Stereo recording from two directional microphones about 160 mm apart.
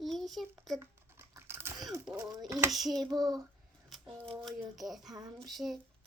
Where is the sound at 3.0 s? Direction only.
25° right (ahead or behind).